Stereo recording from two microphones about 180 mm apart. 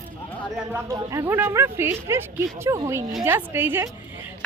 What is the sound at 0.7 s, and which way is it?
Speech, 15° right (ahead or behind).